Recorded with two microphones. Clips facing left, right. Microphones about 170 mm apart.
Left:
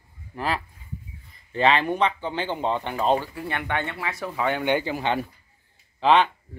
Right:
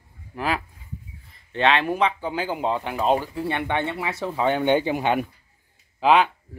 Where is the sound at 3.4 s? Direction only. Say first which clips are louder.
Right 3 dB; 20° right (ahead or behind).